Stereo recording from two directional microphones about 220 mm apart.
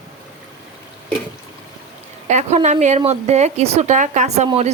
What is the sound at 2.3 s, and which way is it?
Speech, 30° right (ahead or behind).